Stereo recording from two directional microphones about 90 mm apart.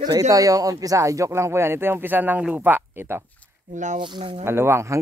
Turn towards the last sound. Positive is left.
turn(degrees=-30)  # may be behind; listen again after turning